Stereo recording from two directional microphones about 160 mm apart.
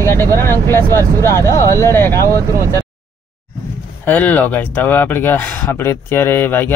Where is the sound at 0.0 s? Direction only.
15° left (ahead or behind).